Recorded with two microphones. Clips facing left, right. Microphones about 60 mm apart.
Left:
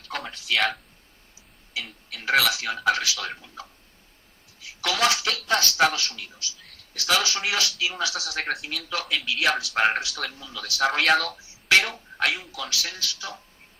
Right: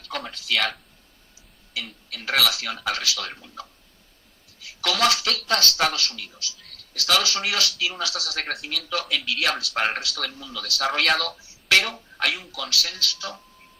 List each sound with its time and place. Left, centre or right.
0.1 s a sound: centre
0.5 s speech: centre
2.0 s speech: left
2.7 s speech: centre
4.8 s speech: centre
8.4 s speech: centre
9.2 s speech: centre
9.7 s speech: centre
10.0 s speech: left
12.1 s speech: centre
12.5 s speech: centre